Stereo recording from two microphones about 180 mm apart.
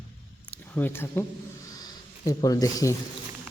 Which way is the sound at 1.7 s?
20° left (ahead or behind).